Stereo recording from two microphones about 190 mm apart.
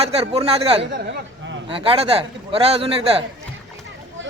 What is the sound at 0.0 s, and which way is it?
A man's voice, 30° right (ahead or behind).